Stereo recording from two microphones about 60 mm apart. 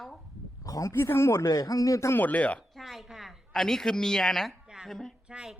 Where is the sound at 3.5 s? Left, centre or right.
Centre.